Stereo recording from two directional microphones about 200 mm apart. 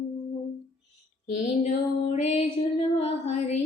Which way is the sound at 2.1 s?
30° left (ahead or behind).